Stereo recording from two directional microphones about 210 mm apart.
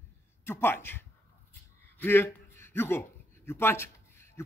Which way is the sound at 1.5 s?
10° left (ahead or behind).